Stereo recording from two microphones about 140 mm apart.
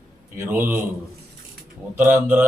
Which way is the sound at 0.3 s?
15° right (ahead or behind).